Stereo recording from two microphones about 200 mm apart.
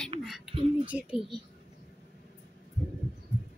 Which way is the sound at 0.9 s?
5° right (ahead or behind).